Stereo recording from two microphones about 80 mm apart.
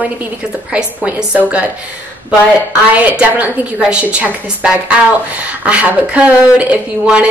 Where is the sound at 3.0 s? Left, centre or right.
Right.